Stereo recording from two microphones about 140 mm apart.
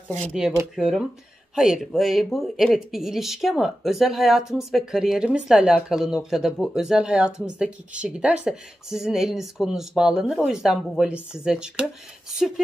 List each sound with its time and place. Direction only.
0.7 s speech: 5° right (ahead or behind)